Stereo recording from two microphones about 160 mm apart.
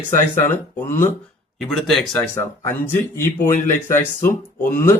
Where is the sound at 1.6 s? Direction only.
Centre (ahead or behind).